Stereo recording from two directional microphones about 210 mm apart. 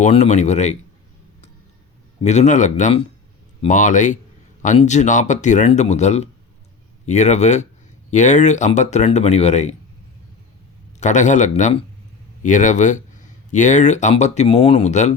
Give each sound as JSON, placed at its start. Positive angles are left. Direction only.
{"t": 0.0, "sound": "speech", "side_deg": 35}
{"t": 2.2, "sound": "speech", "side_deg": 35}
{"t": 11.0, "sound": "speech", "side_deg": 35}